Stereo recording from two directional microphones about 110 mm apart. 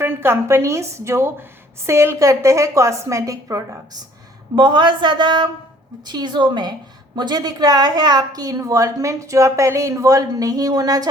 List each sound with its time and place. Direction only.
0.0 s a woman's voice: 20° right (ahead or behind)
4.5 s a woman's voice: 45° right (ahead or behind)